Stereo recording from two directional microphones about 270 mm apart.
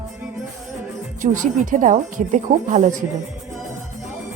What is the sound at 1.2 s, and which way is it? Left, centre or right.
A woman's voice, right.